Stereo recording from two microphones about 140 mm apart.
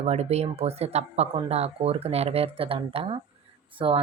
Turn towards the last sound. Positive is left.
turn(degrees=-40)  # may be behind; listen again after turning